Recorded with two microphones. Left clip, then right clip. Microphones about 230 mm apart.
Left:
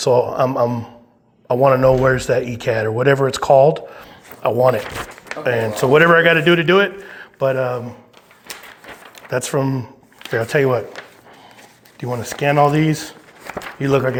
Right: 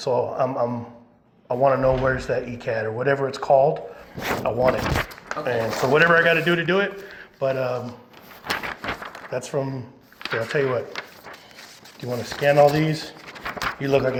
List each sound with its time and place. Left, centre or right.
0.0 s a man's voice: left
9.3 s speech: left
11.9 s a man's voice: left